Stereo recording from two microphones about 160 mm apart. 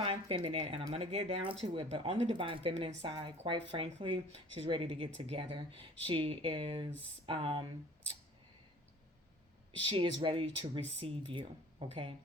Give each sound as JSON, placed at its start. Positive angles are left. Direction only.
{"t": 0.0, "sound": "speech", "side_deg": -35}
{"t": 9.9, "sound": "speech", "side_deg": -30}